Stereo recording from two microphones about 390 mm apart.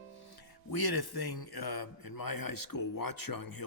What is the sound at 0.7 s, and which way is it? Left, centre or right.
Speech, left.